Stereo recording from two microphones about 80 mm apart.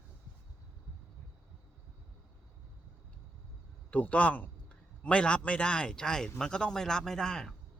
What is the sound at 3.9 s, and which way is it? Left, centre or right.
Speech, centre.